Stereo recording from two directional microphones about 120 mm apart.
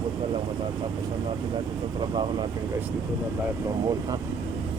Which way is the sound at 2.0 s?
40° right (ahead or behind).